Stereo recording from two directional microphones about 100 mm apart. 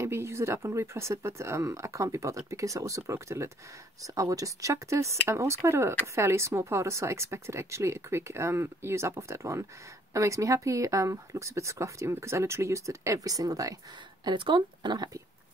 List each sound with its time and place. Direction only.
0.0 s speech: 25° right (ahead or behind)
14.2 s speech: 55° right (ahead or behind)